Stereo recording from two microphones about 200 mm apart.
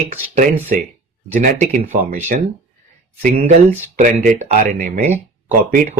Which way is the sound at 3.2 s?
40° right (ahead or behind).